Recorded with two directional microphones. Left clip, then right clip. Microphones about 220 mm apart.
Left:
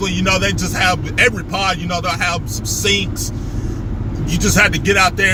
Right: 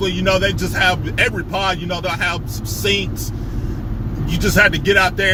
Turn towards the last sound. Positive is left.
turn(degrees=15)  # may be behind; listen again after turning